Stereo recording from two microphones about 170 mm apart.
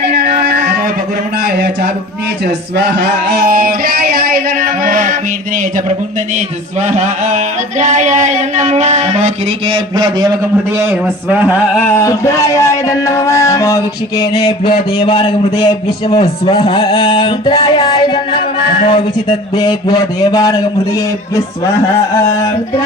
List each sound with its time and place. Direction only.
0.1 s music: 70° right (ahead or behind)
1.5 s a sound: 65° right (ahead or behind); by 5.1 s 50° right (ahead or behind)
6.8 s a sound: 45° right (ahead or behind)
9.6 s a man's voice: 25° right (ahead or behind)
10.8 s speech: 10° right (ahead or behind)
11.9 s speech: 15° left (ahead or behind)
14.9 s a man's voice: 30° left (ahead or behind)
18.8 s a man's voice: 40° left (ahead or behind)
19.5 s a man's voice: 25° left (ahead or behind)